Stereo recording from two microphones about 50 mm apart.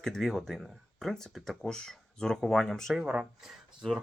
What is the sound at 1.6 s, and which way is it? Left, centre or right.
Speech, centre.